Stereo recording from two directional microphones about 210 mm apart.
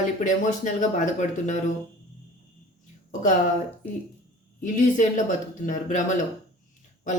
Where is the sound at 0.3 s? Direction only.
35° left (ahead or behind).